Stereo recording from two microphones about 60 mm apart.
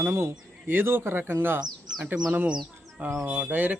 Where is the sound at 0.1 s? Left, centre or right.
Right.